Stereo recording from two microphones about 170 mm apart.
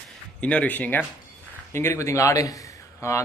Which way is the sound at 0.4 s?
5° left (ahead or behind).